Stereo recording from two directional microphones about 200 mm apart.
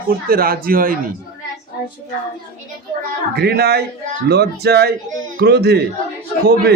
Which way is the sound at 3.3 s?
55° right (ahead or behind).